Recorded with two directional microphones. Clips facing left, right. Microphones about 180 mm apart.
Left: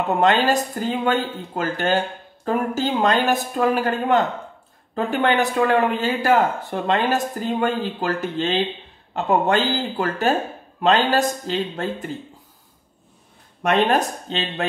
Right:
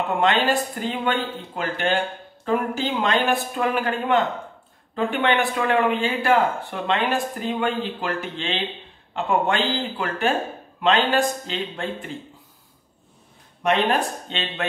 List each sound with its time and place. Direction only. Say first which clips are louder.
0.2 s speech: left 2 dB; 40° left (ahead or behind)
13.6 s speech: left 2 dB; 45° left (ahead or behind)